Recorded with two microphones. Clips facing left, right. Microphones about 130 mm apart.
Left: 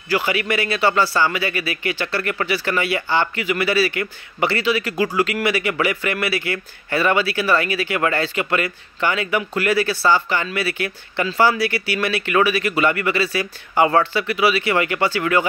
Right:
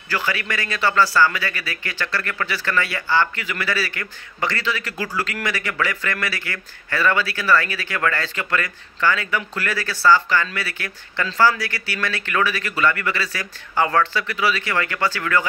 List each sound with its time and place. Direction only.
0.1 s a man's voice: 15° left (ahead or behind)